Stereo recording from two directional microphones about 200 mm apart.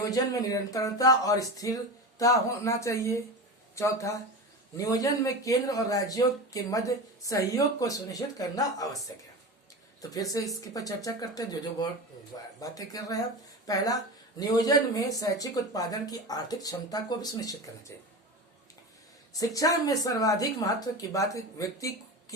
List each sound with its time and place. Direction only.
0.0 s speech: 20° left (ahead or behind)
10.0 s speech: 15° left (ahead or behind)
19.3 s speech: 15° left (ahead or behind)